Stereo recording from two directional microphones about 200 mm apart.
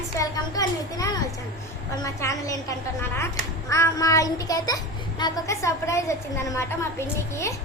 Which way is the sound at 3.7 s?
15° left (ahead or behind).